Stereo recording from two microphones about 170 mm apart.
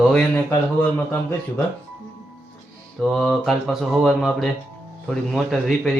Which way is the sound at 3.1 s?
Centre (ahead or behind).